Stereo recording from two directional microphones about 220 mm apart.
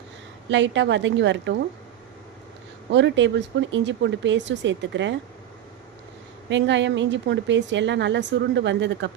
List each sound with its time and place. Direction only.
0.5 s a woman's voice: 55° right (ahead or behind)
2.9 s a woman's voice: 55° right (ahead or behind)
6.5 s a woman's voice: 55° right (ahead or behind)